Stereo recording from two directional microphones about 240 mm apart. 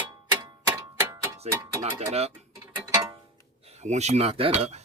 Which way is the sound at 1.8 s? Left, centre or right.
Right.